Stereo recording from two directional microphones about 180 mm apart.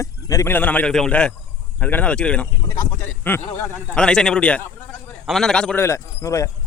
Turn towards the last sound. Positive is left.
turn(degrees=15)  # may be behind; listen again after turning